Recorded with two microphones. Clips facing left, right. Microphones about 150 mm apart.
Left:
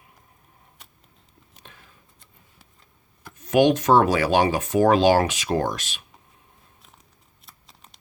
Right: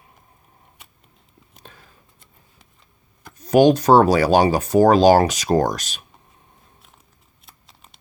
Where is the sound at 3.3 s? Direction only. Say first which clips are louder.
Right 4 dB; 35° right (ahead or behind).